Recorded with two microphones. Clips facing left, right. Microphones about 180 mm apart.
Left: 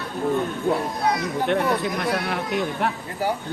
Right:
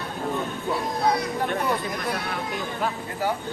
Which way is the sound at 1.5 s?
70° left (ahead or behind).